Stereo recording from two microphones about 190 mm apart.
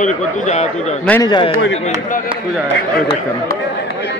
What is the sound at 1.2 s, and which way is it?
Speech, 25° left (ahead or behind).